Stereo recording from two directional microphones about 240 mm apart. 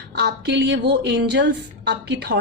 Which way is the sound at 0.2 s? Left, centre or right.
Right.